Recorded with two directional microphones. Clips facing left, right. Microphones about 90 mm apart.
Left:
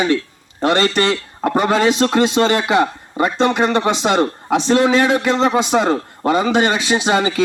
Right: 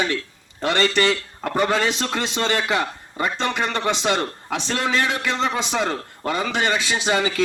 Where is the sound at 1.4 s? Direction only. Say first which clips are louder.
Left 6 dB; 15° left (ahead or behind).